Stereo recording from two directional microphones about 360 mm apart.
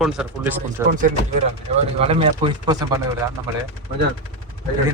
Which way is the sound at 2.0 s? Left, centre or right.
Centre.